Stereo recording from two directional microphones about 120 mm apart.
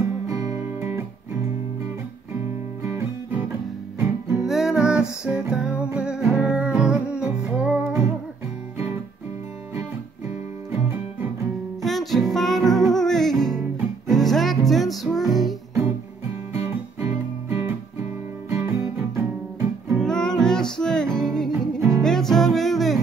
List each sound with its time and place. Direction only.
0.3 s music: 25° right (ahead or behind)
2.8 s guitar: 25° right (ahead or behind)
4.0 s music: 10° right (ahead or behind)
10.7 s music: 15° right (ahead or behind)
11.8 s music: centre (ahead or behind)
16.5 s guitar: 20° right (ahead or behind)
19.9 s music: 5° left (ahead or behind)
21.5 s music: 25° right (ahead or behind)
22.0 s music: 5° left (ahead or behind)